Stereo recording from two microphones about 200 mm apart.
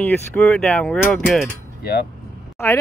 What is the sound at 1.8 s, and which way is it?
Speech, 50° left (ahead or behind).